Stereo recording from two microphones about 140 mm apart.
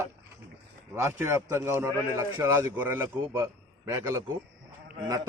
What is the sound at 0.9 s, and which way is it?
A man's voice, 20° right (ahead or behind).